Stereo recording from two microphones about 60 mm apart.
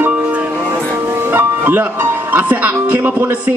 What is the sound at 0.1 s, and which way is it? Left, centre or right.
Music, centre.